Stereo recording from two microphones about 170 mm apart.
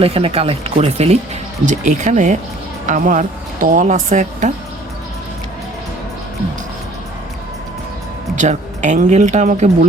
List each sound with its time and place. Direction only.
0.0 s a woman's voice: 35° right (ahead or behind)
8.4 s a woman's voice: 45° right (ahead or behind)